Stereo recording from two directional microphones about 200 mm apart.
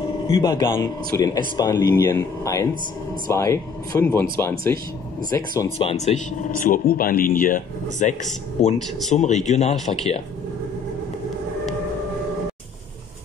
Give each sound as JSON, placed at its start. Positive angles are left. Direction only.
{"t": 0.3, "sound": "speech", "side_deg": 20}